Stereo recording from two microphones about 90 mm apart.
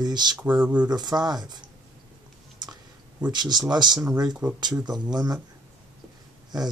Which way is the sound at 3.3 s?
50° right (ahead or behind).